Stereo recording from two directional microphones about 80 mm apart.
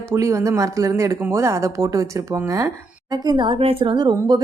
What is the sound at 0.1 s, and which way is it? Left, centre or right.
Speech, right.